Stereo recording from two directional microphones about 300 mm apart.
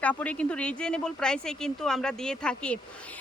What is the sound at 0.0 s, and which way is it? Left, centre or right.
Speech, centre.